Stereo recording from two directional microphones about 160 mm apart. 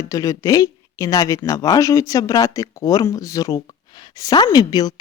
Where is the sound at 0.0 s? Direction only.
20° left (ahead or behind).